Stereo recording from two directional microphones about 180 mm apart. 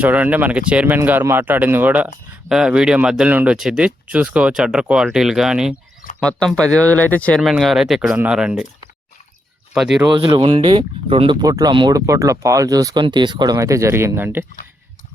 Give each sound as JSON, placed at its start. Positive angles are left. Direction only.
{"t": 0.0, "sound": "speech", "side_deg": -10}
{"t": 9.7, "sound": "speech", "side_deg": -5}
{"t": 10.1, "sound": "speech", "side_deg": -25}